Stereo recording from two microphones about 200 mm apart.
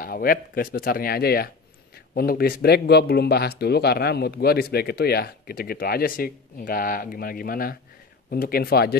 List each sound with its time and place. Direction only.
0.0 s speech: 45° left (ahead or behind)